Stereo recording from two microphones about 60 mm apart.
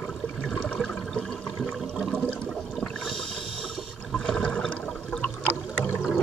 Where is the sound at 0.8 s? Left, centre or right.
Centre.